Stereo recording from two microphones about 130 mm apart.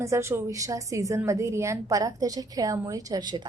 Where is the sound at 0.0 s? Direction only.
20° right (ahead or behind).